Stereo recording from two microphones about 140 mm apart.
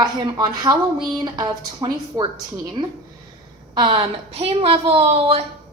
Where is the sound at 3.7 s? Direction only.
40° right (ahead or behind).